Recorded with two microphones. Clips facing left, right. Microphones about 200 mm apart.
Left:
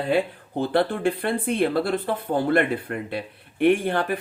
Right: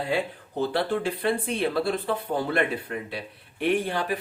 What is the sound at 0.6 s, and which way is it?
Speech, 55° left (ahead or behind).